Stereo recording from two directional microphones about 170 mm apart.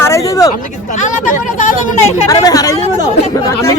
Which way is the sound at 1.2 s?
50° left (ahead or behind).